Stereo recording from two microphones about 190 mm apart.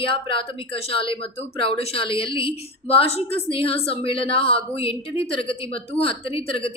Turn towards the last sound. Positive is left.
turn(degrees=30)  # may be behind; listen again after turning